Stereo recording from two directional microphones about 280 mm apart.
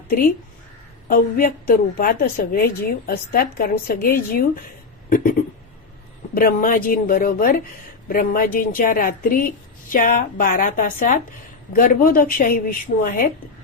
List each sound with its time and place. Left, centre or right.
1.0 s a woman's voice: left
5.0 s a sound: left
6.3 s a woman's voice: left